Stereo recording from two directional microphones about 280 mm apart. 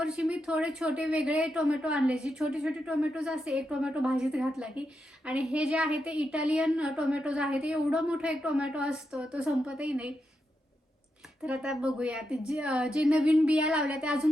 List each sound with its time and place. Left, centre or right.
0.0 s a woman's voice: centre
11.4 s a woman's voice: centre